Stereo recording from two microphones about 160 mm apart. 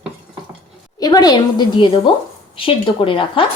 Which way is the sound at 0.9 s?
25° left (ahead or behind).